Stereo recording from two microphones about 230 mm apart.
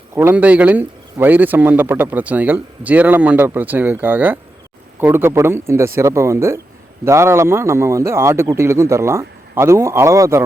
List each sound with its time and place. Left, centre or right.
0.1 s a man's voice: centre